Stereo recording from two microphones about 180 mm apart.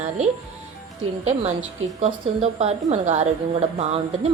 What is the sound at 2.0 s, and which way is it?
A woman's voice, 35° right (ahead or behind).